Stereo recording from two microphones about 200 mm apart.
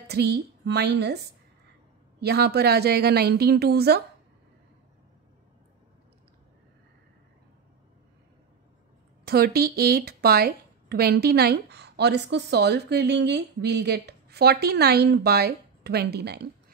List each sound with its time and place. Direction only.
0.1 s a woman's voice: 55° right (ahead or behind)
9.2 s a woman's voice: 50° right (ahead or behind)